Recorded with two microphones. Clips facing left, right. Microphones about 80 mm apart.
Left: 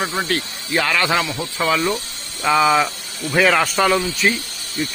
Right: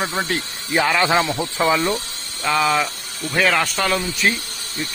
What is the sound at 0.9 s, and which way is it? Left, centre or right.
Speech, centre.